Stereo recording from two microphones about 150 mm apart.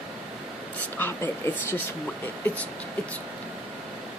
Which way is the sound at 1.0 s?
15° left (ahead or behind).